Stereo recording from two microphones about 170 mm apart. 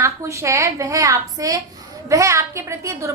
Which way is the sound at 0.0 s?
15° right (ahead or behind).